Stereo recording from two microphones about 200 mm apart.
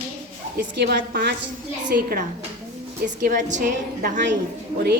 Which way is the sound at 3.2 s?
40° right (ahead or behind).